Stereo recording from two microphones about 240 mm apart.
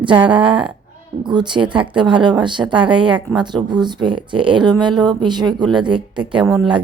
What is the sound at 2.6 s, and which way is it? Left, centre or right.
Speech, centre.